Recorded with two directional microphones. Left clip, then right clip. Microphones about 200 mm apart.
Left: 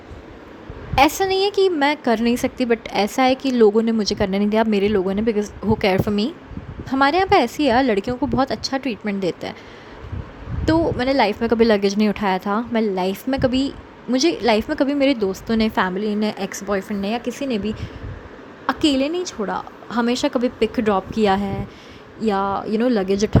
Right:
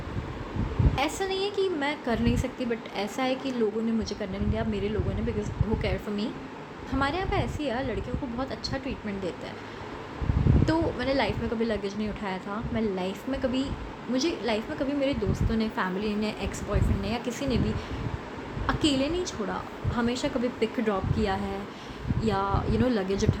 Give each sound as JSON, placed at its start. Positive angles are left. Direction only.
{"t": 0.9, "sound": "speech", "side_deg": 50}
{"t": 10.7, "sound": "speech", "side_deg": 40}
{"t": 18.6, "sound": "speech", "side_deg": 40}